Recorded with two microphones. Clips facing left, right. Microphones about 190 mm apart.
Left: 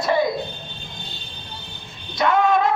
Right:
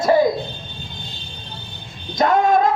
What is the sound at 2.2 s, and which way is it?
Speech, 45° right (ahead or behind).